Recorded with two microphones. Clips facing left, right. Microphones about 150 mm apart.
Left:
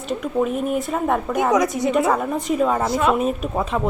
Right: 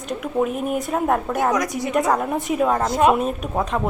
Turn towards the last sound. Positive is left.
turn(degrees=0)  # may be behind; listen again after turning